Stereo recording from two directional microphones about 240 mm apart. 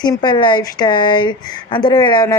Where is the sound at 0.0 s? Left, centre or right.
Centre.